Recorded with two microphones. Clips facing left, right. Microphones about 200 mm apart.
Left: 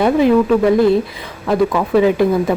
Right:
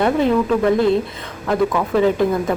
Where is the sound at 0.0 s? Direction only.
5° left (ahead or behind).